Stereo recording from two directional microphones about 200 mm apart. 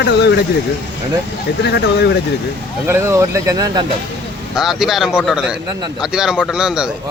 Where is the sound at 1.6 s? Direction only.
55° left (ahead or behind).